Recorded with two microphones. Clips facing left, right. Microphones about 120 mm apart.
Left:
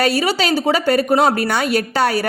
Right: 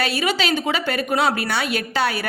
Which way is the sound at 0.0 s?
40° left (ahead or behind).